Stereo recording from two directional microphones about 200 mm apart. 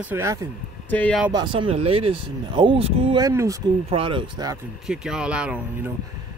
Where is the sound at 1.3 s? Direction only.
25° right (ahead or behind).